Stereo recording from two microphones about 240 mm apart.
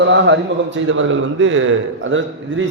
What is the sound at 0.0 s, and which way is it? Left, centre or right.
A man's voice, right.